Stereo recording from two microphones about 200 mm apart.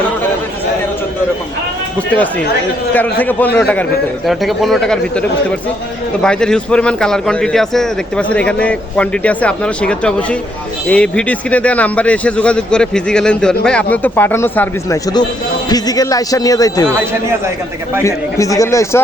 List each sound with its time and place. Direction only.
2.0 s a man's voice: 10° left (ahead or behind)
16.9 s speech: 10° right (ahead or behind)
18.0 s a man's voice: 15° left (ahead or behind)